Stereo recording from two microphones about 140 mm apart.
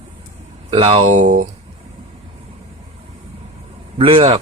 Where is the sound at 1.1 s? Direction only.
65° right (ahead or behind).